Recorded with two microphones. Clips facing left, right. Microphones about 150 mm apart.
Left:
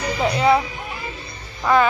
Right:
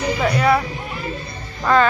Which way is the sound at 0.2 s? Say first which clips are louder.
Left 2 dB; 20° left (ahead or behind).